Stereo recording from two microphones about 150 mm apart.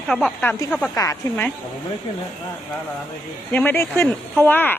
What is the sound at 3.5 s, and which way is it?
Speech, 10° left (ahead or behind).